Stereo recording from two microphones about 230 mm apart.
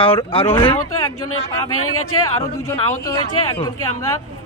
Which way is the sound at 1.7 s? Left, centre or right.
Left.